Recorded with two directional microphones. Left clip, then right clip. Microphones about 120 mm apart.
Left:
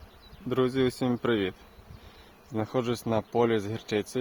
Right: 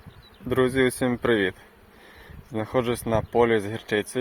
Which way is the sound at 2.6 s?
10° left (ahead or behind).